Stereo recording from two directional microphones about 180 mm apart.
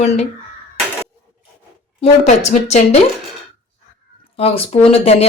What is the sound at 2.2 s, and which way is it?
Speech, 40° left (ahead or behind).